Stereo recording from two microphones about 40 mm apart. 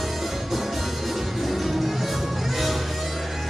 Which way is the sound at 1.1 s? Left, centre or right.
Centre.